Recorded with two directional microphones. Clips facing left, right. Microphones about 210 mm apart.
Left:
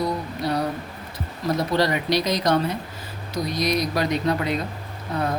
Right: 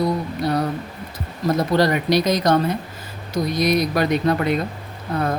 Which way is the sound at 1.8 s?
50° right (ahead or behind).